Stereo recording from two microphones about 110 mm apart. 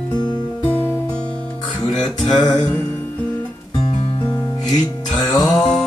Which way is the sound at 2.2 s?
45° left (ahead or behind).